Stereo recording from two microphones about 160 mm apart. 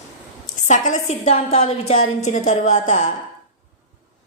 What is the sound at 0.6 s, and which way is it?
A woman's voice, 50° left (ahead or behind).